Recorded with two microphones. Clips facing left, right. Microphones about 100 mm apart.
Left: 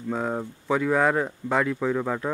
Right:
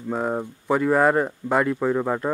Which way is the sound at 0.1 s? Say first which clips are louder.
Right 3 dB; 10° right (ahead or behind).